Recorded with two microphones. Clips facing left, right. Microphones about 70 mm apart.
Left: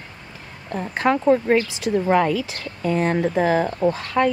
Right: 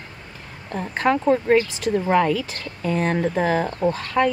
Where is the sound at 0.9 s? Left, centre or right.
Left.